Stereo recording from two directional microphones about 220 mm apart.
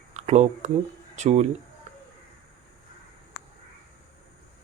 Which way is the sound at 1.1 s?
30° right (ahead or behind).